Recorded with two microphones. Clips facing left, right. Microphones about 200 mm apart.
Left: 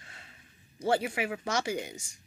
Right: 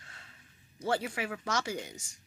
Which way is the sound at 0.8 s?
10° left (ahead or behind).